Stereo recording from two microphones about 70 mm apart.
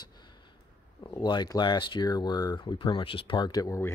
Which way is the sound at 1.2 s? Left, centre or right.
Left.